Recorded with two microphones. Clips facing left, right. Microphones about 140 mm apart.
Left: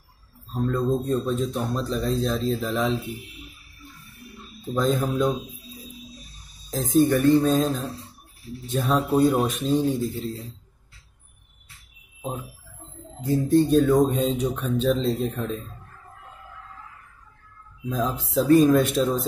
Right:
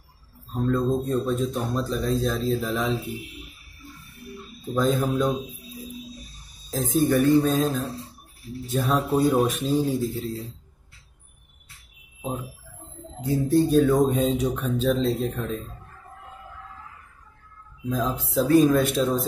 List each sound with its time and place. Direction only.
0.7 s speech: centre (ahead or behind)
4.6 s speech: centre (ahead or behind)
6.7 s speech: centre (ahead or behind)
13.2 s speech: 5° right (ahead or behind)
17.8 s speech: centre (ahead or behind)